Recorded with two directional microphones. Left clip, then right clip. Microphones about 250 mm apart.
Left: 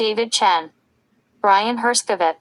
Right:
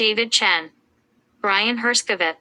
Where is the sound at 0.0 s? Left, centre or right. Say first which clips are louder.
Left 1 dB; centre.